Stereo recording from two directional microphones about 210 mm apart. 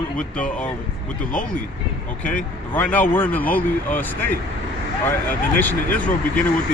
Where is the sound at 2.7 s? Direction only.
10° left (ahead or behind).